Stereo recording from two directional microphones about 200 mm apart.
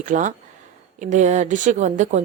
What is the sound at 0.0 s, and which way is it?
Speech, 40° right (ahead or behind).